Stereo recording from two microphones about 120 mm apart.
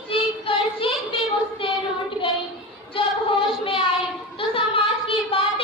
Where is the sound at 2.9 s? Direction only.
50° left (ahead or behind).